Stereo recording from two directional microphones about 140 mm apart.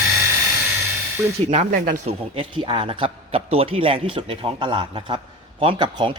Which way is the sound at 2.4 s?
35° right (ahead or behind).